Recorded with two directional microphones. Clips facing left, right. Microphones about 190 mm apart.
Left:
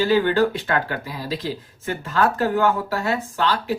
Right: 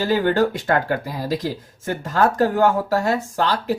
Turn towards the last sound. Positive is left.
turn(degrees=-40)  # may be behind; listen again after turning